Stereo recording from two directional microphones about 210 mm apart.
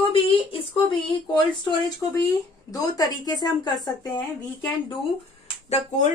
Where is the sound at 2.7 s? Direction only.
15° left (ahead or behind).